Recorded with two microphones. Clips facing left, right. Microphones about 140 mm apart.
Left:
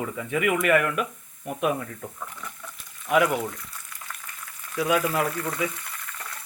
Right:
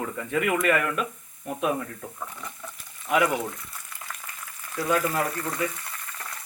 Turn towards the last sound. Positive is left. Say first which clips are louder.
# left 1 dB
turn(degrees=5)  # may be behind; listen again after turning